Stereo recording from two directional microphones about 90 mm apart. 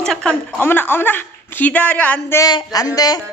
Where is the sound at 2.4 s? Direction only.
45° left (ahead or behind).